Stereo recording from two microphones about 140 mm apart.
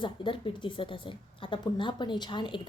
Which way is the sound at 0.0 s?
35° left (ahead or behind).